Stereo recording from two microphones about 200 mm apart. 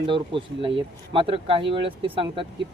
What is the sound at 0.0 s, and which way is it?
Speech, 25° right (ahead or behind).